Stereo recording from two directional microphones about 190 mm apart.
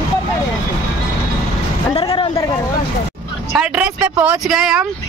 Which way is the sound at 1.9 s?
30° left (ahead or behind).